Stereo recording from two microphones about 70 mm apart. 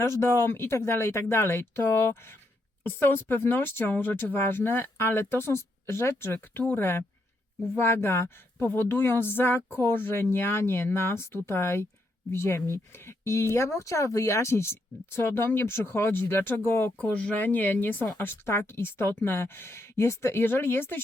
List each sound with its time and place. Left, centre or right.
0.0 s speech: left